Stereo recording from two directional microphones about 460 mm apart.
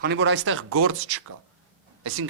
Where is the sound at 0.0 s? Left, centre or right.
Right.